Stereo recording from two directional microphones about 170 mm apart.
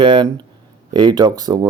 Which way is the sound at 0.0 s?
30° right (ahead or behind).